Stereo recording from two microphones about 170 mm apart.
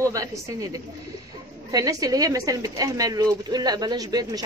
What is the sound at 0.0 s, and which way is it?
Speech, 20° right (ahead or behind).